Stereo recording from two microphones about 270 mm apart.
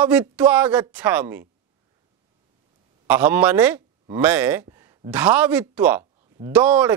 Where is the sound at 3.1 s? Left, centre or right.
Centre.